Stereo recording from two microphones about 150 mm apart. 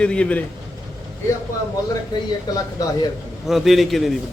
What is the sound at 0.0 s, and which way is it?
Speech, 5° left (ahead or behind).